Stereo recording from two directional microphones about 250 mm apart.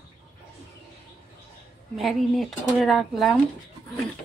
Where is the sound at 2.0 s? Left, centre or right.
Centre.